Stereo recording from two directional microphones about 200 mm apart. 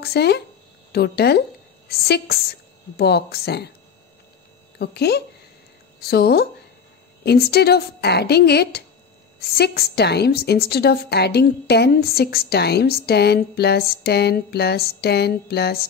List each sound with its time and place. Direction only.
0.0 s a woman's voice: 55° left (ahead or behind)
4.7 s a woman's voice: 55° left (ahead or behind)